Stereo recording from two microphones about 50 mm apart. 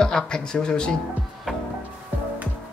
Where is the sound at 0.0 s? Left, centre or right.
Centre.